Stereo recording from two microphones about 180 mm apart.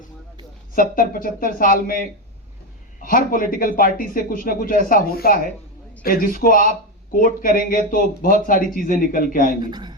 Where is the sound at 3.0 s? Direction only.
50° left (ahead or behind).